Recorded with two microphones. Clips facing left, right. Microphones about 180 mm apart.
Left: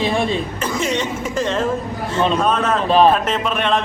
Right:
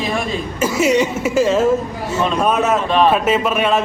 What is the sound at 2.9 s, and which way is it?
Speech, 35° left (ahead or behind).